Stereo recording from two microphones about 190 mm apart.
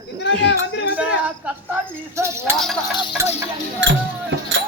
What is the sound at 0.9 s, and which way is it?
Speech, 5° right (ahead or behind).